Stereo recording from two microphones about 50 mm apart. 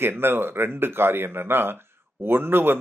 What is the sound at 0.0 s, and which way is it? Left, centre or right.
Speech, right.